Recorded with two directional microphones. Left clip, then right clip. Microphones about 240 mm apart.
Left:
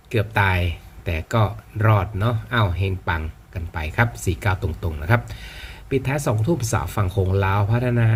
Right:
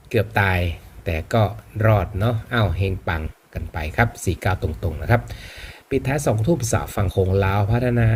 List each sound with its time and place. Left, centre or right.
0.1 s speech: centre
4.4 s speech: left
5.5 s speech: centre